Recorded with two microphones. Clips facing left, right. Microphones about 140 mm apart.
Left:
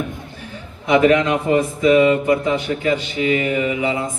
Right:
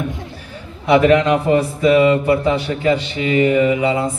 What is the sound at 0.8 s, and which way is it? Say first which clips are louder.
Speech: right 2 dB; 35° right (ahead or behind).